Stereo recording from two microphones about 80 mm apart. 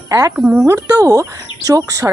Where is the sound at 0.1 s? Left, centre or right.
Right.